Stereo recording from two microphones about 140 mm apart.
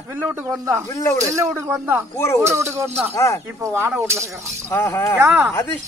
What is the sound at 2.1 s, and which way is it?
Speech, 20° left (ahead or behind).